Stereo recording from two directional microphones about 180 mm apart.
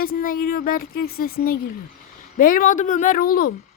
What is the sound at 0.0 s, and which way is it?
Speech, 55° left (ahead or behind).